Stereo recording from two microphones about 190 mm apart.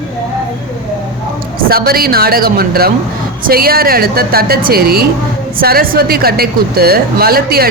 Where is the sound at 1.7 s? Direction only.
50° right (ahead or behind).